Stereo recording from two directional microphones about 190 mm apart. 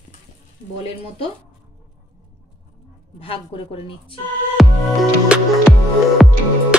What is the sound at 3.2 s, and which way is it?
Speech, 30° left (ahead or behind).